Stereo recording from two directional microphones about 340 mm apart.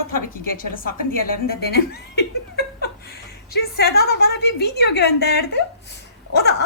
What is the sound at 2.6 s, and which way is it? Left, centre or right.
Chuckle, left.